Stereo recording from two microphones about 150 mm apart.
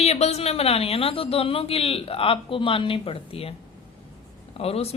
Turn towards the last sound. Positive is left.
turn(degrees=40)  # may be behind; listen again after turning